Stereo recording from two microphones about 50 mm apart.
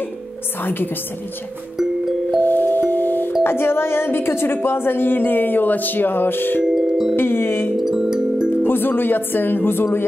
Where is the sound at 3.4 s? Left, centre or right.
Left.